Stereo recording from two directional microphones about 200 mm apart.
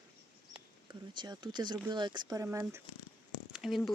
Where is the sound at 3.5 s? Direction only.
Centre (ahead or behind).